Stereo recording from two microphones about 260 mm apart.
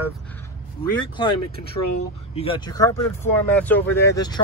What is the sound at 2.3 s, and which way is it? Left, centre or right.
Speech, left.